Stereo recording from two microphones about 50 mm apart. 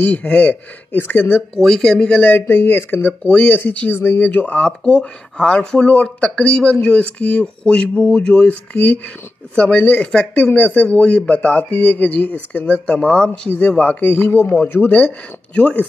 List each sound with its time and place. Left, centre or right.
0.2 s speech: left
1.1 s speech: left
1.8 s speech: centre
2.1 s speech: left
2.4 s speech: left
4.6 s speech: centre
8.5 s speech: left
14.5 s speech: left